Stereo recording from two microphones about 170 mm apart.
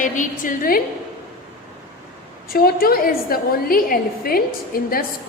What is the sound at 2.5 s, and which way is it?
A woman's voice, 60° left (ahead or behind).